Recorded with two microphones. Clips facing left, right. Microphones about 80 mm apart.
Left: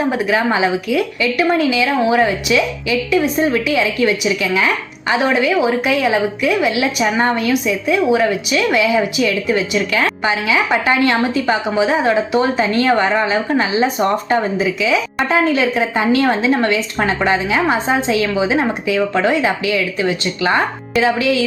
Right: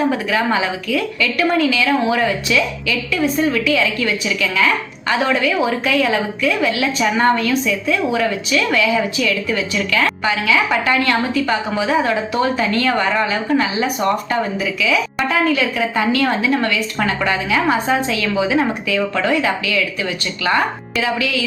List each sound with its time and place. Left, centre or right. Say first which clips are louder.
0.1 s a woman's voice: left 2 dB; centre